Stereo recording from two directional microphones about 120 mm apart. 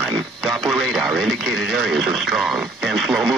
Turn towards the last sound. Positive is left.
turn(degrees=-5)  # may be behind; listen again after turning